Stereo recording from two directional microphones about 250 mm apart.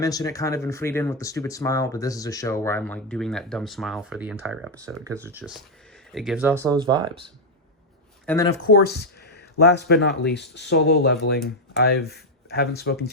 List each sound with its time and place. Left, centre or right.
0.0 s speech: centre
8.3 s speech: centre
8.6 s speech: left